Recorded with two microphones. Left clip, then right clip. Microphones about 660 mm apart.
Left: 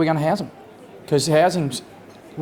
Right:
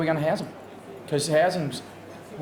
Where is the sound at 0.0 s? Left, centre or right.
Left.